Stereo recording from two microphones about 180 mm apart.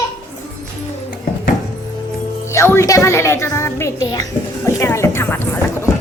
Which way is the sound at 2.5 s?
15° left (ahead or behind).